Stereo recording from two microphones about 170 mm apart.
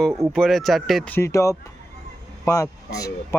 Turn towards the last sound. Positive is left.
turn(degrees=20)  # may be behind; listen again after turning